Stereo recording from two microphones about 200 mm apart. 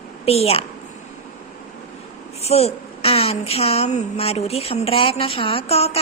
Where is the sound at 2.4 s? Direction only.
30° left (ahead or behind).